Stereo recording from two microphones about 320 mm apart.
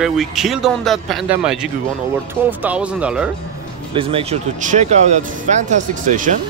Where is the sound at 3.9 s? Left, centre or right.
Centre.